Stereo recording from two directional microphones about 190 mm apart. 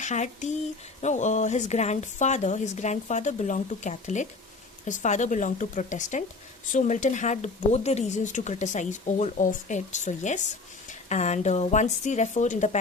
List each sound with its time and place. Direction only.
0.0 s speech: 40° left (ahead or behind)